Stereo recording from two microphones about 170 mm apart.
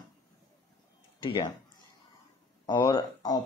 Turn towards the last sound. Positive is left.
turn(degrees=25)  # may be behind; listen again after turning